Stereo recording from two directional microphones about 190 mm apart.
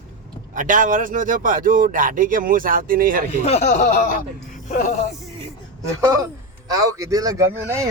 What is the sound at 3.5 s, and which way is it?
Speech, 35° left (ahead or behind).